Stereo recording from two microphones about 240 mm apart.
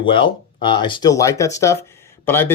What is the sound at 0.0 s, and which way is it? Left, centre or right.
Speech, left.